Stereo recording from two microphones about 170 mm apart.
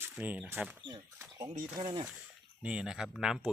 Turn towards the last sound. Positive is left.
turn(degrees=0)  # may be behind; listen again after turning